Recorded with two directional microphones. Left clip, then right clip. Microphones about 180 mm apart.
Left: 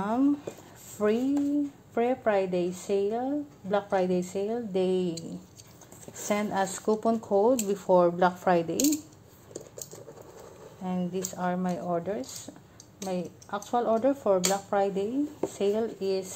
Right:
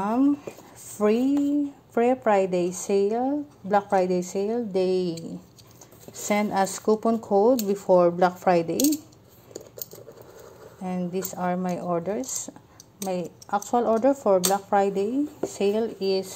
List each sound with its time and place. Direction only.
0.0 s a sound: 20° right (ahead or behind)
2.0 s a woman's voice: 25° right (ahead or behind)
6.2 s a woman's voice: 20° right (ahead or behind)
10.8 s a woman's voice: 20° right (ahead or behind)